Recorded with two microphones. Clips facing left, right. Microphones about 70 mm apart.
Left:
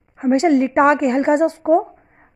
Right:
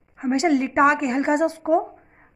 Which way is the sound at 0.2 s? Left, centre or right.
Left.